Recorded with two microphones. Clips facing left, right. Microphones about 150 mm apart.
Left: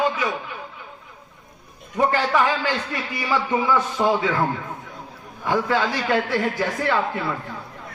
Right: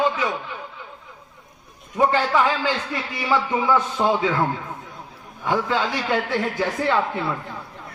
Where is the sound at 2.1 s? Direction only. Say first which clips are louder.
Even; 15° right (ahead or behind).